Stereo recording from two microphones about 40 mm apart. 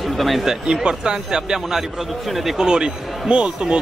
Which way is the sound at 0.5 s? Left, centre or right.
Centre.